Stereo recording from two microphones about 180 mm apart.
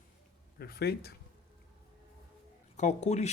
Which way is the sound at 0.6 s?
60° left (ahead or behind).